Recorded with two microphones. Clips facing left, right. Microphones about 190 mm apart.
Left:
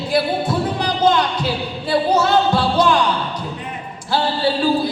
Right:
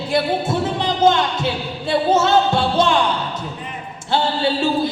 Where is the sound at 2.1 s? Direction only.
25° right (ahead or behind).